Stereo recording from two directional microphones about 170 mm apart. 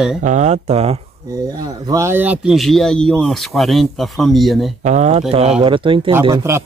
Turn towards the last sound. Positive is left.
turn(degrees=-20)  # may be behind; listen again after turning